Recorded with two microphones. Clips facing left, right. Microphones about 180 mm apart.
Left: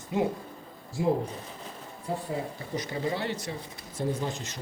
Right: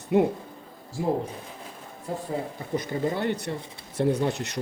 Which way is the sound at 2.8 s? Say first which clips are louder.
Right 3 dB; 50° right (ahead or behind).